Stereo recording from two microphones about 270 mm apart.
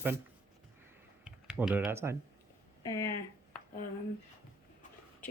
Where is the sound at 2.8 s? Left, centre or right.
Centre.